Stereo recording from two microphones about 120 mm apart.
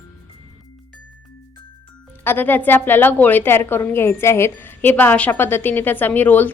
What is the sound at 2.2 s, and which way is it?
A woman's voice, 15° left (ahead or behind).